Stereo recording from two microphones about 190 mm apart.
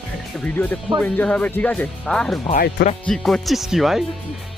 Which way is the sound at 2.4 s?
50° left (ahead or behind).